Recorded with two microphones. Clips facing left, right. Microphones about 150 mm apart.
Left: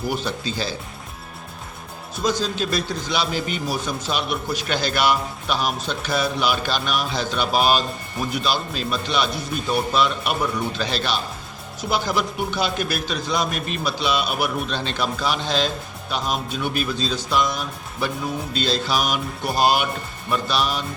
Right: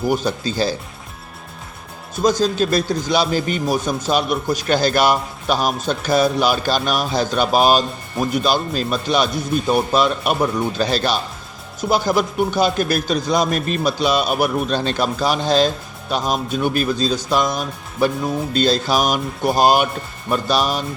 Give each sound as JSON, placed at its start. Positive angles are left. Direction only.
{"t": 0.1, "sound": "speech", "side_deg": -45}
{"t": 2.2, "sound": "speech", "side_deg": -45}